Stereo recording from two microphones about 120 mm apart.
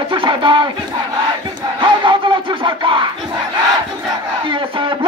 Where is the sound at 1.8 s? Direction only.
40° right (ahead or behind).